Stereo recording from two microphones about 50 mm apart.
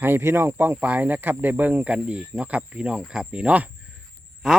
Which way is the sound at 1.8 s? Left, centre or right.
Right.